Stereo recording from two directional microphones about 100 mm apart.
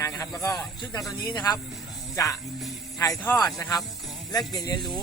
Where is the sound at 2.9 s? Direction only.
35° left (ahead or behind).